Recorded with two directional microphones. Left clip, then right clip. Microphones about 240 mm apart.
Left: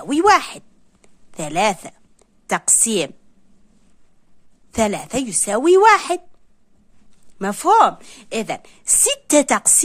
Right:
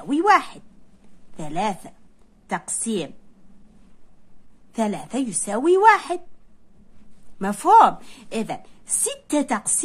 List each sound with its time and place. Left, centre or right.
0.0 s a woman's voice: left
4.7 s a woman's voice: left
7.3 s a woman's voice: left